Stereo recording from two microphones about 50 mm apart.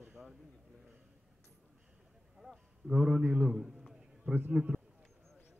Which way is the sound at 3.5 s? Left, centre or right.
Centre.